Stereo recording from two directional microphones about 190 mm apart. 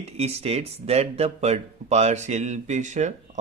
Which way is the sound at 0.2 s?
35° right (ahead or behind).